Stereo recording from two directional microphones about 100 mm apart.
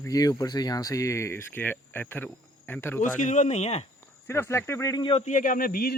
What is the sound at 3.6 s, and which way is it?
Speech, 90° left.